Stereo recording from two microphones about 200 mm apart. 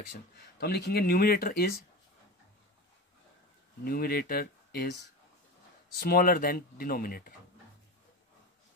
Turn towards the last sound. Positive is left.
turn(degrees=45)  # may be behind; listen again after turning